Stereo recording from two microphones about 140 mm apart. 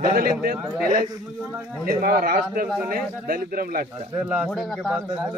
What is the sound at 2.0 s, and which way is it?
A man's voice, 90° right.